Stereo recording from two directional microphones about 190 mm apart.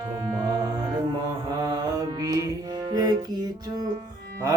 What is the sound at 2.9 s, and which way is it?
Music, 20° right (ahead or behind).